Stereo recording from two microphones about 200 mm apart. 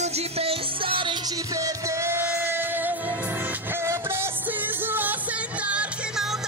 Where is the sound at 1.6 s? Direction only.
15° right (ahead or behind).